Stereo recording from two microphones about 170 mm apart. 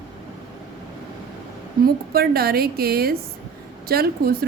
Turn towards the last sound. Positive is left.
turn(degrees=-65)  # may be behind; listen again after turning